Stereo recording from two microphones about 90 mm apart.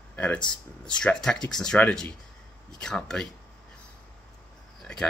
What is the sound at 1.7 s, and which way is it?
Speech, 15° left (ahead or behind).